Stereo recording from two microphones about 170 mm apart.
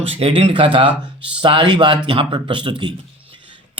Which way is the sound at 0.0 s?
35° right (ahead or behind).